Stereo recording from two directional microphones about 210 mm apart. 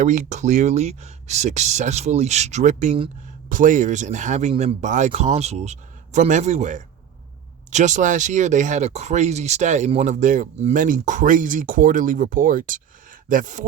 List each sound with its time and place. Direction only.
0.0 s speech: 35° right (ahead or behind)